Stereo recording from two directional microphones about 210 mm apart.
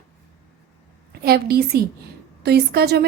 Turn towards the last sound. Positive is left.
turn(degrees=-50)  # may be behind; listen again after turning